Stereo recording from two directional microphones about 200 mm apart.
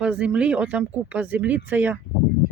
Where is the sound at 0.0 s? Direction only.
5° right (ahead or behind).